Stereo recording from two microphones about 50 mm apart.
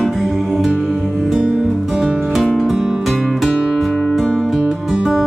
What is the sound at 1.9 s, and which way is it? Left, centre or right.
Music, centre.